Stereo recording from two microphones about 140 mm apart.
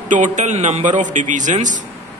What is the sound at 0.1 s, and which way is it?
A man's voice, 60° right (ahead or behind).